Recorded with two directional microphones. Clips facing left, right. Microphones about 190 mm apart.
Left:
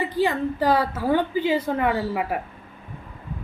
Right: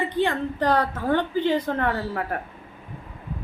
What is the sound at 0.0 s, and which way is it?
A woman's voice, 5° left (ahead or behind).